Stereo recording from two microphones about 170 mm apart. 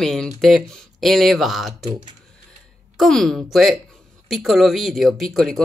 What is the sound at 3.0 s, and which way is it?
Speech, centre (ahead or behind).